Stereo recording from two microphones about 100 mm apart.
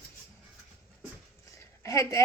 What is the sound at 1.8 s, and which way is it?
Speech, 30° left (ahead or behind).